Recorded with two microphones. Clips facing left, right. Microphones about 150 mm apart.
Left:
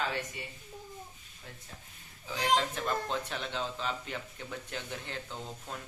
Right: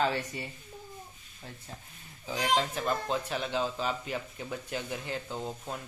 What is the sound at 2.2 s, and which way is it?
Speech, 15° right (ahead or behind).